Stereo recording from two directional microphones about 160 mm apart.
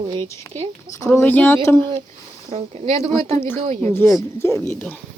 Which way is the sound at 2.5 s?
45° right (ahead or behind).